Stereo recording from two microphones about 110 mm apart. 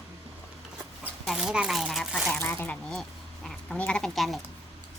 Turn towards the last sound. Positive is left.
turn(degrees=0)  # may be behind; listen again after turning